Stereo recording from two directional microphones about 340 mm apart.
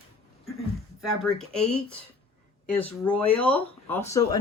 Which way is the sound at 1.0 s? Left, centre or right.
Centre.